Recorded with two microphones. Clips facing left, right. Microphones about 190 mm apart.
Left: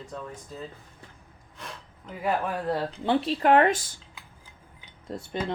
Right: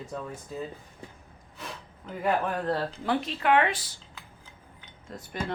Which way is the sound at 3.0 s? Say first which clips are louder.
Left 4 dB; 30° left (ahead or behind).